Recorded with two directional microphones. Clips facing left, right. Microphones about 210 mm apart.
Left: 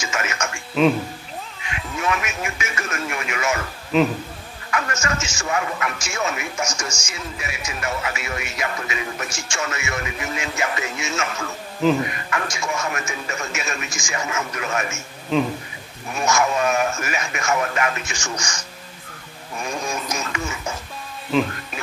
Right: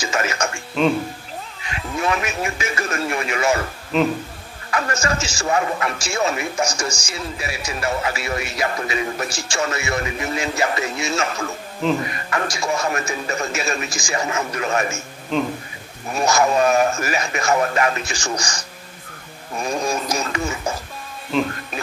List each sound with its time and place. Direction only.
0.0 s speech: 35° right (ahead or behind)
0.8 s speech: centre (ahead or behind)
1.7 s a man's voice: 35° right (ahead or behind)
3.9 s speech: centre (ahead or behind)
4.6 s a man's voice: 35° right (ahead or behind)
15.3 s speech: centre (ahead or behind)
16.1 s a man's voice: 35° right (ahead or behind)
21.3 s speech: centre (ahead or behind)